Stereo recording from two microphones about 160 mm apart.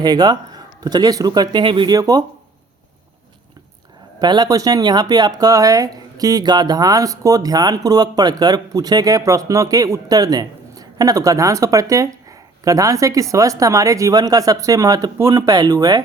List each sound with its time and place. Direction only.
0.0 s speech: 25° right (ahead or behind)
4.2 s speech: 25° right (ahead or behind)